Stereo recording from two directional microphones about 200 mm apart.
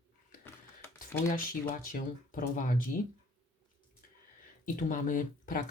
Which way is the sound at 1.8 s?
45° left (ahead or behind).